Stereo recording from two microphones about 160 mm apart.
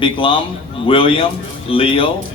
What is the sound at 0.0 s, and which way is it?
A man's voice, 30° left (ahead or behind).